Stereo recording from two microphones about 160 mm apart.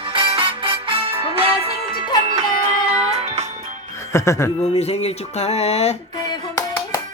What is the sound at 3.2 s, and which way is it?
Music, 45° right (ahead or behind).